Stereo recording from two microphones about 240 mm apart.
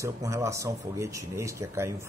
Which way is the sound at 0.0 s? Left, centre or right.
Centre.